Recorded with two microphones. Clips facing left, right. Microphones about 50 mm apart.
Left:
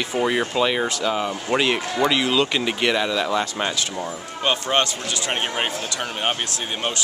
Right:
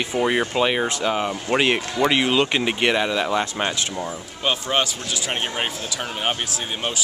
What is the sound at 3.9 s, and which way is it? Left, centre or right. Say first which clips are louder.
Speech: left 1 dB; centre.